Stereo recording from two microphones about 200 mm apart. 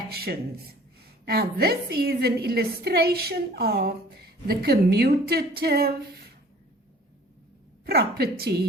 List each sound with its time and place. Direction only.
0.1 s a woman's voice: 50° right (ahead or behind)
7.9 s a woman's voice: 50° right (ahead or behind)